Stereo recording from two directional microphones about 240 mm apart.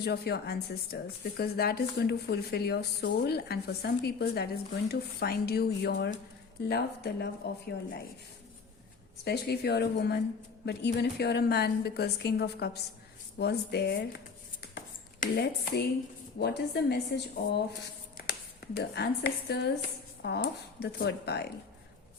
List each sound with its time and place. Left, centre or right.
0.0 s speech: left
9.2 s a woman's voice: left
15.2 s a woman's voice: left
18.8 s a woman's voice: left